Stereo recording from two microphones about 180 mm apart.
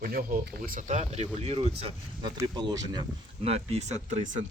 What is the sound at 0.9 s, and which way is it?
Speech, 40° right (ahead or behind).